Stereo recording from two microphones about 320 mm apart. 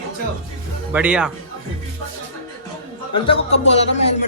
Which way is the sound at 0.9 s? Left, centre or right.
Centre.